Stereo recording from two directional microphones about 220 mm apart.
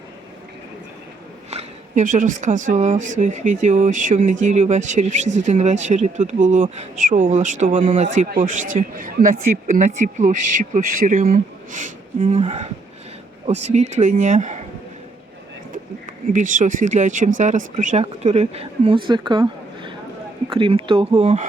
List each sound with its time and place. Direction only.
1.5 s speech: 30° right (ahead or behind)
13.9 s speech: 35° right (ahead or behind)
16.3 s speech: 35° right (ahead or behind)